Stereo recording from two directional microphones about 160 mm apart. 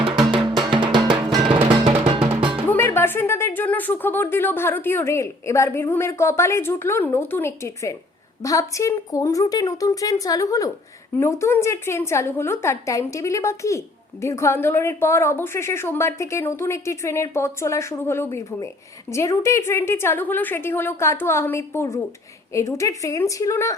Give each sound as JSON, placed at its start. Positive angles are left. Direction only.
{"t": 0.6, "sound": "music", "side_deg": -30}
{"t": 2.6, "sound": "a woman's voice", "side_deg": 15}